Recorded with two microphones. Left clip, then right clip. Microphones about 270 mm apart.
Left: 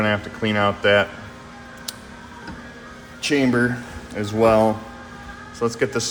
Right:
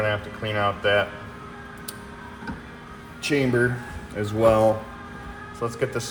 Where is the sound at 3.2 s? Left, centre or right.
Left.